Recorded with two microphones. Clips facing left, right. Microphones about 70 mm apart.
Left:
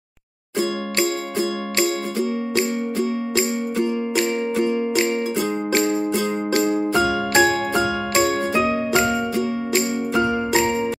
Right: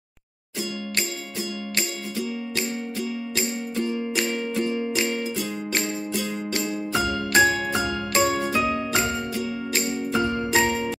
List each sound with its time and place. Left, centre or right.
1.8 s music: left
6.1 s music: left